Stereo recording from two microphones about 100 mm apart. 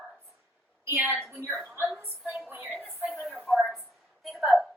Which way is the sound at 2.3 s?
20° right (ahead or behind).